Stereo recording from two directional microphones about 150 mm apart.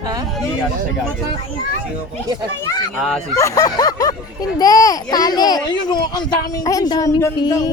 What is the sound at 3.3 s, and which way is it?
Speech, 20° left (ahead or behind).